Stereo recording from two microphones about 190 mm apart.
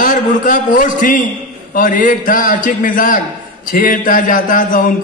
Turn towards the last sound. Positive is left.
turn(degrees=45)  # may be behind; listen again after turning